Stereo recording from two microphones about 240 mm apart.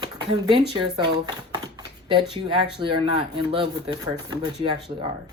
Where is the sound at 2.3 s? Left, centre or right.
Centre.